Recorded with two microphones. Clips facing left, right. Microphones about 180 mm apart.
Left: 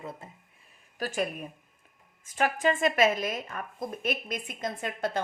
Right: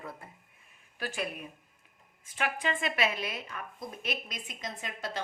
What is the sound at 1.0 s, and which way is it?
Speech, 45° left (ahead or behind).